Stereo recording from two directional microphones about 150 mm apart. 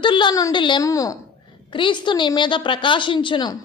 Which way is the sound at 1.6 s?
30° left (ahead or behind).